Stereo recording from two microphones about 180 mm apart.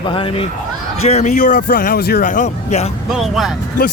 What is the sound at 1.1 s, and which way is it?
A man's voice, 40° left (ahead or behind).